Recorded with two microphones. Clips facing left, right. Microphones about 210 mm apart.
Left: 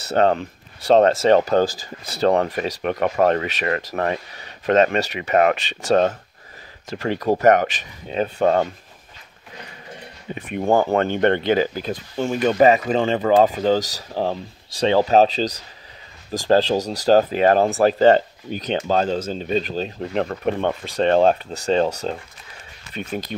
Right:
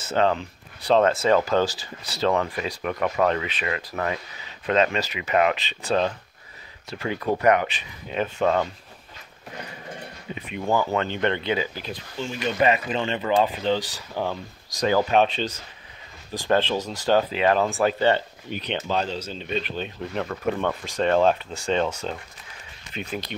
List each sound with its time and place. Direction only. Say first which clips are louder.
0.1 s speech: left 4 dB; 40° left (ahead or behind)
10.3 s speech: left 6 dB; 50° left (ahead or behind)